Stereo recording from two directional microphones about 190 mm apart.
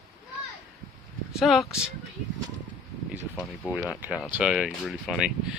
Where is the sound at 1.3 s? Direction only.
Centre (ahead or behind).